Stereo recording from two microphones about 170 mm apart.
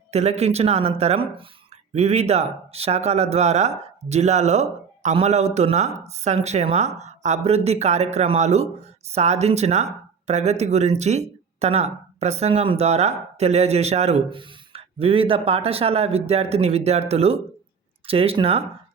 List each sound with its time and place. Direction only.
0.1 s speech: 40° right (ahead or behind)